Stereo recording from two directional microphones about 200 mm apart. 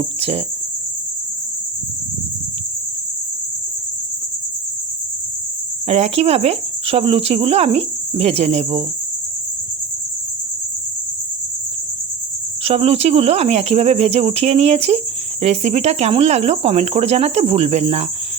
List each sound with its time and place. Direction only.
0.2 s speech: 30° right (ahead or behind)
5.9 s speech: 30° right (ahead or behind)
12.6 s speech: 30° right (ahead or behind)